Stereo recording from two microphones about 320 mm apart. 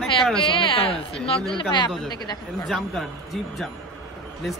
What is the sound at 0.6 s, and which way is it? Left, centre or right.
Speech, centre.